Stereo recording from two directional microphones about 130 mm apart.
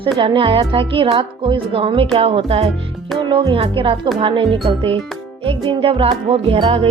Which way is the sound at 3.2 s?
35° right (ahead or behind).